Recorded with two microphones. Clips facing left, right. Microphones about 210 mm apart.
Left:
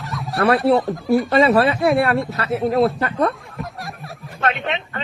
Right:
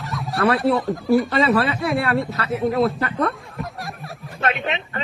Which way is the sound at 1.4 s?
30° left (ahead or behind).